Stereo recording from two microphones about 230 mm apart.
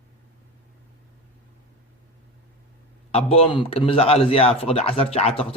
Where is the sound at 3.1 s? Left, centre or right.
Left.